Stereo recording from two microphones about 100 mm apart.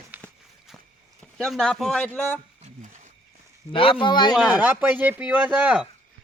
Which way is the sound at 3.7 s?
60° left (ahead or behind).